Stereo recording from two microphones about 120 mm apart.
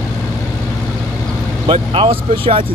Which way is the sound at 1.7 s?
45° right (ahead or behind).